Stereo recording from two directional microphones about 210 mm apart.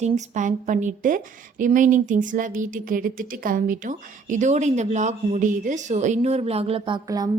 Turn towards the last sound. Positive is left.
turn(degrees=-20)  # may be behind; listen again after turning